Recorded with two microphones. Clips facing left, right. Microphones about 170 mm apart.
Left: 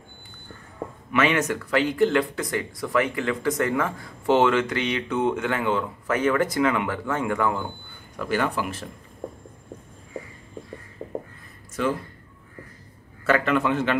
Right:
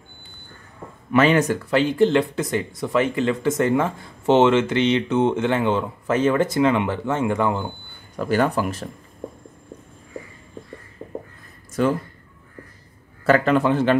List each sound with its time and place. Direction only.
1.1 s speech: 35° right (ahead or behind)
8.2 s a man's voice: 40° right (ahead or behind)
13.2 s a man's voice: 35° right (ahead or behind)